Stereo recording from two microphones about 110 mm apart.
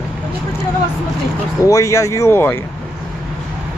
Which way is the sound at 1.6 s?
30° left (ahead or behind).